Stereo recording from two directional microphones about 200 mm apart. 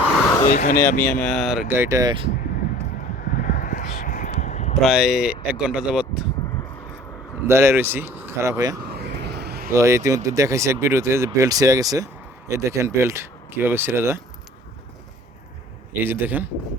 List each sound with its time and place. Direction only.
0.4 s speech: 40° left (ahead or behind)
0.9 s speech: 5° left (ahead or behind); by 2.1 s 15° right (ahead or behind)
3.0 s a sound: 40° left (ahead or behind)
4.8 s speech: centre (ahead or behind)
7.4 s speech: 10° right (ahead or behind)
8.9 s vehicle: 55° right (ahead or behind)
9.7 s speech: 15° right (ahead or behind)
15.9 s speech: 10° right (ahead or behind)